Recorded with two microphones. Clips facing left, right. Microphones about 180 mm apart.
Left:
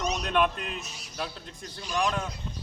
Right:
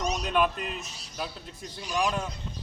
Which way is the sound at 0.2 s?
Centre (ahead or behind).